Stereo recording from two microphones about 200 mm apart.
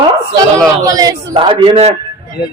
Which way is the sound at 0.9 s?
15° right (ahead or behind).